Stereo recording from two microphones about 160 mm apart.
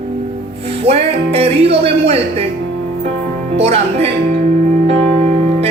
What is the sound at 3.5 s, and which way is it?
Speech, 40° right (ahead or behind).